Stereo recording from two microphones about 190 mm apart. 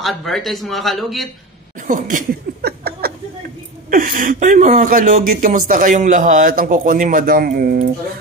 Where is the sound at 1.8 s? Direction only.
45° right (ahead or behind).